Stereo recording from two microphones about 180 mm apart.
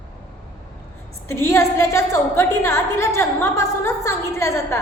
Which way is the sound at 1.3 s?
15° left (ahead or behind).